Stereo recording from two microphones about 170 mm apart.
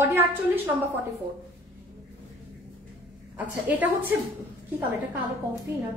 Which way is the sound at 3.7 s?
10° right (ahead or behind).